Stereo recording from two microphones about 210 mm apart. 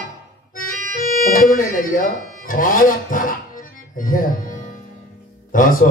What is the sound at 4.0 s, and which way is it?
Speech, 40° left (ahead or behind).